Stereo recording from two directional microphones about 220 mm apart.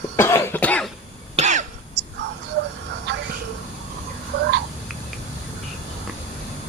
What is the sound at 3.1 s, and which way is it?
Train, 50° right (ahead or behind).